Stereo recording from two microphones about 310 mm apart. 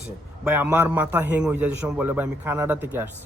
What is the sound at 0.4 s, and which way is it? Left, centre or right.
A man's voice, centre.